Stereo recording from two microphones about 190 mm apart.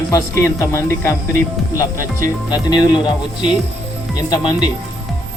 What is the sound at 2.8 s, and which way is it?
Speech, 25° left (ahead or behind).